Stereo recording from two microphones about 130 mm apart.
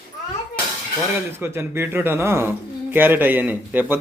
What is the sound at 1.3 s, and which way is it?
Speech, 20° right (ahead or behind).